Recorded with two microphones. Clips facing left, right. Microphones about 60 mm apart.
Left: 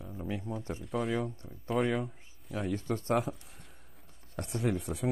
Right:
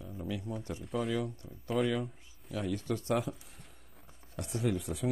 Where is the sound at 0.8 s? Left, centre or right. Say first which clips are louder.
Left 1 dB; centre.